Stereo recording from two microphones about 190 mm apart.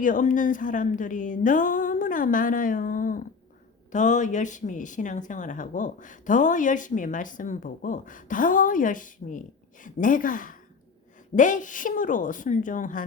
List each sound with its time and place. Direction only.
0.0 s speech: 45° left (ahead or behind)